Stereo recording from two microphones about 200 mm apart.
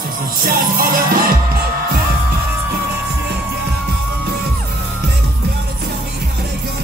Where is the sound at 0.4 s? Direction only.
45° right (ahead or behind).